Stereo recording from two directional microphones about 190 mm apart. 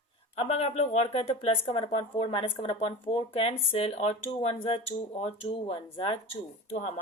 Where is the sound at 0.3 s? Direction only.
35° left (ahead or behind).